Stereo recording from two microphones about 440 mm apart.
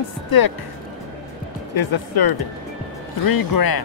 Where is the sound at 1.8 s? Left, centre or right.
Left.